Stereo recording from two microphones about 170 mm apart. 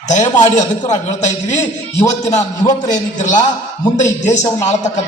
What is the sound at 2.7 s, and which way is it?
A man's voice, 45° left (ahead or behind).